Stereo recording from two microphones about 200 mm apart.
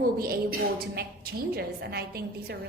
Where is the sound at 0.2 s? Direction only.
50° right (ahead or behind).